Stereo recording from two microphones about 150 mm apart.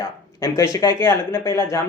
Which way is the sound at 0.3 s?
20° left (ahead or behind).